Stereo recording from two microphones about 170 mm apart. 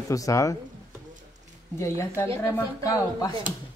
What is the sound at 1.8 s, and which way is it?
Speech, 15° left (ahead or behind).